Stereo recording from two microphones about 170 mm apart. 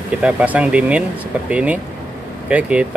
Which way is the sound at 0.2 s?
5° right (ahead or behind).